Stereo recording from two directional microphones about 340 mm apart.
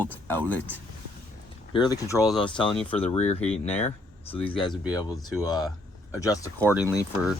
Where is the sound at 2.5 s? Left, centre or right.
Centre.